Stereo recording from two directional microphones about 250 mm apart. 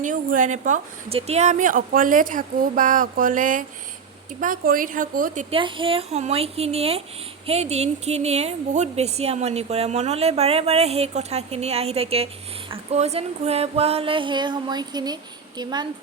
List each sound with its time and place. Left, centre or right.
0.0 s a woman's voice: right